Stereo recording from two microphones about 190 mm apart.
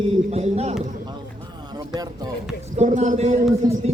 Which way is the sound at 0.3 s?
35° right (ahead or behind).